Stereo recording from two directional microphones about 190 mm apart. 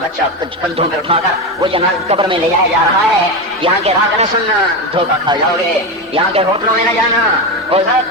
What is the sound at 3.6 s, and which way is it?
Speech, 30° right (ahead or behind).